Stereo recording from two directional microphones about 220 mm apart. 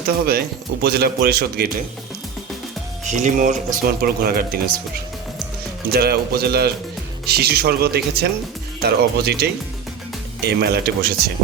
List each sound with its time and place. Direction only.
0.3 s speech: 45° right (ahead or behind)
3.0 s speech: 35° right (ahead or behind)
5.9 s speech: 45° right (ahead or behind)